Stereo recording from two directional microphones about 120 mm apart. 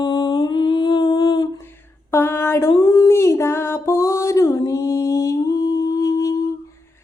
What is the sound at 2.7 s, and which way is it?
Music, 30° left (ahead or behind).